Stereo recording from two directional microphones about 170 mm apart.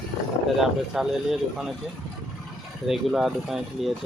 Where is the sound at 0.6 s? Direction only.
Centre (ahead or behind).